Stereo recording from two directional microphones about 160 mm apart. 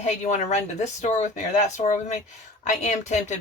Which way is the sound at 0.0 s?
45° left (ahead or behind).